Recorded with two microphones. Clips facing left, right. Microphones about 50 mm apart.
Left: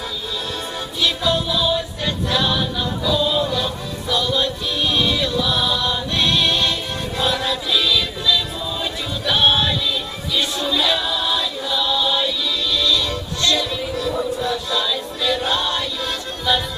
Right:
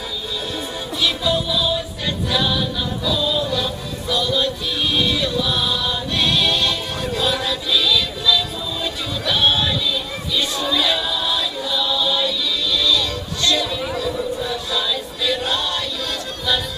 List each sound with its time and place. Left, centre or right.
1.0 s music: centre
10.6 s choir: centre
12.7 s music: centre
13.4 s a sound: centre